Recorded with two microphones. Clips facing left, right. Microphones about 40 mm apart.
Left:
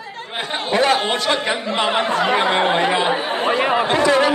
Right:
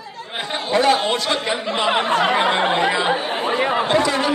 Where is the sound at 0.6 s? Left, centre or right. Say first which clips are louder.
Even; left.